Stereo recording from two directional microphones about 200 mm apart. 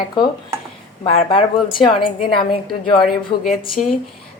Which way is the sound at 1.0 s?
25° left (ahead or behind).